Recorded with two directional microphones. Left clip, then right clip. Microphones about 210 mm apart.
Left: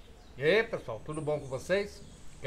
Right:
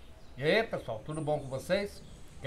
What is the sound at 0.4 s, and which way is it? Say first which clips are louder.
A man's voice: left 2 dB; 10° left (ahead or behind).